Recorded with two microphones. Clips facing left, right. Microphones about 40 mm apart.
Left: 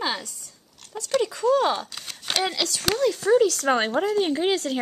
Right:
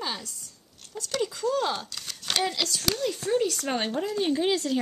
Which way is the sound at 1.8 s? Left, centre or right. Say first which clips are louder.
Left 1 dB; left.